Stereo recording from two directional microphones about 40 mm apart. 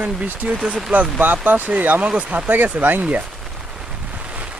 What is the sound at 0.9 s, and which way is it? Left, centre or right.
Speech, right.